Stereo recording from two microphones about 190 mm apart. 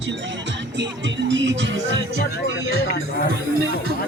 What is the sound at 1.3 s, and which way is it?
Music, 70° right (ahead or behind).